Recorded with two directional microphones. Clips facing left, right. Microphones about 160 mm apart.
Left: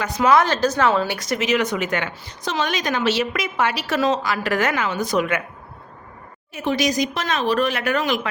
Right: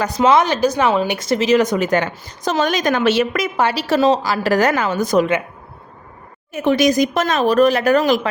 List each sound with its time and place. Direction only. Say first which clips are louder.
0.0 s speech: right 3 dB; 30° right (ahead or behind)
6.5 s speech: right 6 dB; 50° right (ahead or behind)